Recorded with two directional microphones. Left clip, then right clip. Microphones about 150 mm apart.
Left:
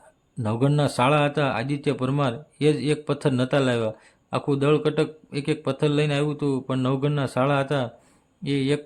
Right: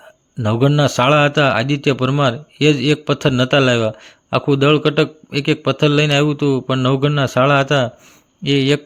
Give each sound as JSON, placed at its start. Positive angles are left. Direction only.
{"t": 0.4, "sound": "a man's voice", "side_deg": -25}